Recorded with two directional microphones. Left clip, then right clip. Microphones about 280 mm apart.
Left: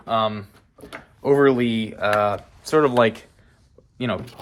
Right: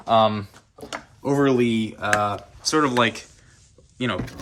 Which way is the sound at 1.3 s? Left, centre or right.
Left.